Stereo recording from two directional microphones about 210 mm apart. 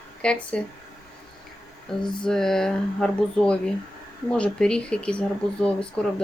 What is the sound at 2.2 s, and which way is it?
Speech, centre (ahead or behind).